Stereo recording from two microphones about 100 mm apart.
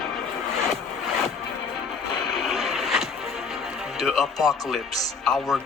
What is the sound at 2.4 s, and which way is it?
Vehicle, centre (ahead or behind).